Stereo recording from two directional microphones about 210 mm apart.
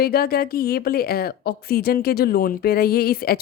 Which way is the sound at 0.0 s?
45° left (ahead or behind).